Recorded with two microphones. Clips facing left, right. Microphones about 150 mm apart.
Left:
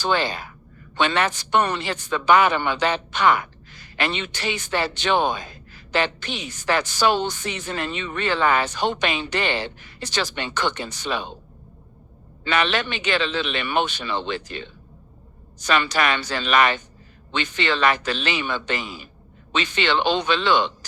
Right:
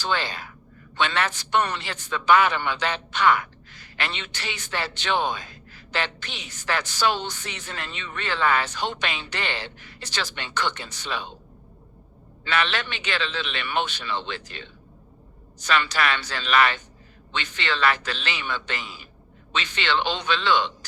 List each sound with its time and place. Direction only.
0.0 s a woman's voice: 15° left (ahead or behind)
12.5 s a woman's voice: 15° left (ahead or behind)